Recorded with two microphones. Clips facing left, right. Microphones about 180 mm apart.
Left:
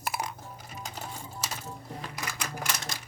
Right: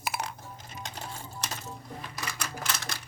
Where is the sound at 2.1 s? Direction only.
15° left (ahead or behind).